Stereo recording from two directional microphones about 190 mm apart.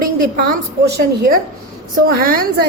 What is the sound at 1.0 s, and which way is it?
Speech, 50° right (ahead or behind).